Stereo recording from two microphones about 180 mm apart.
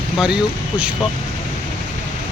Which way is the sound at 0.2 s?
5° right (ahead or behind).